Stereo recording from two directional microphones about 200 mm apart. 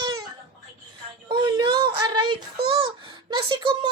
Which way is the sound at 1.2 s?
25° right (ahead or behind).